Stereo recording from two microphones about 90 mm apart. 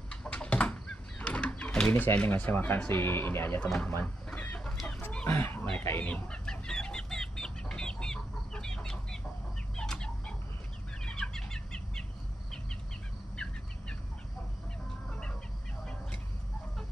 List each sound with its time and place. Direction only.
0.1 s a sound: 10° left (ahead or behind)
2.0 s speech: 20° left (ahead or behind)
3.9 s chicken: 20° left (ahead or behind)
5.2 s speech: 25° left (ahead or behind)
5.9 s chicken: 20° left (ahead or behind)
9.8 s bird: 10° left (ahead or behind)
11.1 s a sound: 10° left (ahead or behind)
15.0 s chicken: 10° left (ahead or behind)